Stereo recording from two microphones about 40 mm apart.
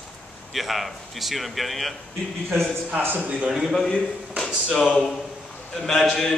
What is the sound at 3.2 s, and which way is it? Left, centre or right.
Speech, right.